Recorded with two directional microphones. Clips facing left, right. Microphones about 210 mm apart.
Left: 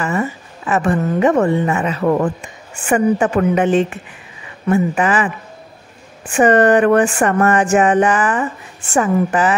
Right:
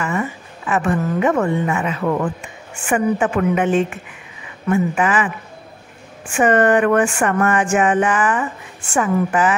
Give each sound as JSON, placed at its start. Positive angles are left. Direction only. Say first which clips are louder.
{"t": 0.0, "sound": "speech", "louder": "left 3 dB", "side_deg": 35}
{"t": 6.3, "sound": "speech", "louder": "left 3 dB", "side_deg": 35}